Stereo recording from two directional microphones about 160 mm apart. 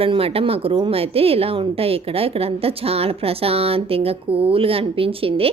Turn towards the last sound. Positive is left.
turn(degrees=-35)  # may be behind; listen again after turning